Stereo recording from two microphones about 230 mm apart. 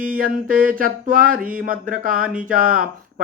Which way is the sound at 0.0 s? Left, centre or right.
Right.